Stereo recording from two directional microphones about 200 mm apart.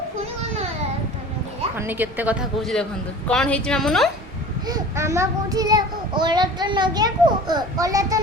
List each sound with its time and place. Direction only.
1.7 s a woman's voice: 10° right (ahead or behind)
4.6 s a child's voice: 15° right (ahead or behind)